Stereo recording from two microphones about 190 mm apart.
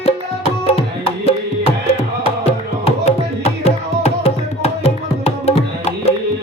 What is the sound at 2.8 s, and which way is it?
Tabla, 35° left (ahead or behind).